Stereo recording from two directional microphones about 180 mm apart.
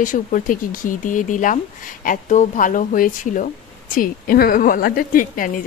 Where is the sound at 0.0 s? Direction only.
45° left (ahead or behind).